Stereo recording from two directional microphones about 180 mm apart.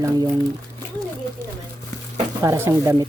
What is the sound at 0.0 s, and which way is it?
Speech, 15° right (ahead or behind).